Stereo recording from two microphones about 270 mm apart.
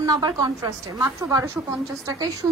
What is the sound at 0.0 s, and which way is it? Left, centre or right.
A woman's voice, centre.